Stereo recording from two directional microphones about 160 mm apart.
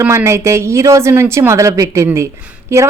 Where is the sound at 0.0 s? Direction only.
15° right (ahead or behind).